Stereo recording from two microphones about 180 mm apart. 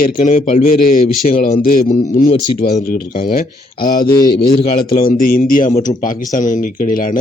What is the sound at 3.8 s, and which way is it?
Speech, 25° left (ahead or behind).